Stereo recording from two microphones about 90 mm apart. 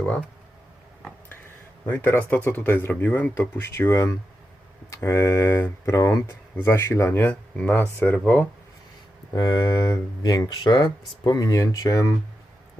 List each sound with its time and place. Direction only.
1.9 s speech: 20° left (ahead or behind)
9.3 s speech: 45° left (ahead or behind)